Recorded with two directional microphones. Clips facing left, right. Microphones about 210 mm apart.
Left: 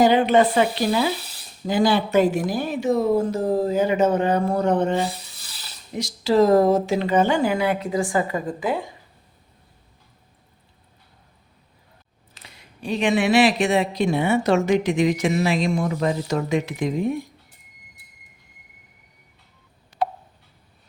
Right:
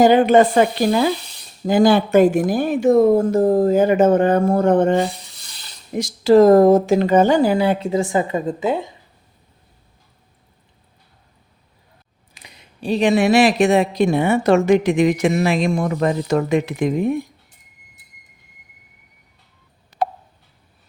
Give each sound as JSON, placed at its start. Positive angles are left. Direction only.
{"t": 0.0, "sound": "a woman's voice", "side_deg": -45}
{"t": 12.3, "sound": "a sound", "side_deg": -15}
{"t": 12.8, "sound": "a woman's voice", "side_deg": -35}
{"t": 20.0, "sound": "tick", "side_deg": -45}